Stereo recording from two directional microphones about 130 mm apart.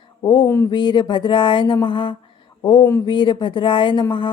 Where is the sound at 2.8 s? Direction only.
20° left (ahead or behind).